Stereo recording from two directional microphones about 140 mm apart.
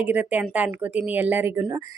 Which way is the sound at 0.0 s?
10° right (ahead or behind).